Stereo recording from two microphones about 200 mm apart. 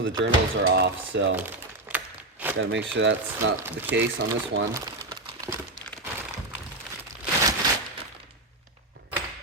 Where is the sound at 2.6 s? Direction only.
65° right (ahead or behind).